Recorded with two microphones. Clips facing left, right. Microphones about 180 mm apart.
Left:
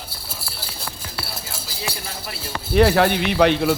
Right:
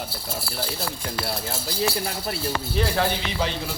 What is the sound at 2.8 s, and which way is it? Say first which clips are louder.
Speech: left 10 dB; 70° left (ahead or behind).